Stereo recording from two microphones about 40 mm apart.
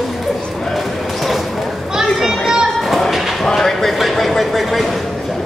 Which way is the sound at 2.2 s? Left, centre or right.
Centre.